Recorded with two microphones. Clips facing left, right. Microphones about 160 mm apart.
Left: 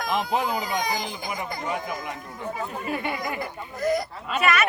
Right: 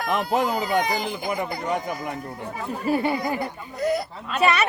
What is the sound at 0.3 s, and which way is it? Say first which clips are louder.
Speech: right 4 dB; 60° right (ahead or behind).